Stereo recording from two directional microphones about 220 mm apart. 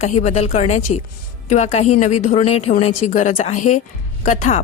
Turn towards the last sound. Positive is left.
turn(degrees=35)  # may be behind; listen again after turning